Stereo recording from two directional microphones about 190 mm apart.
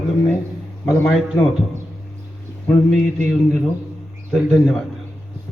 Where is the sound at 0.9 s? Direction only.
Centre (ahead or behind).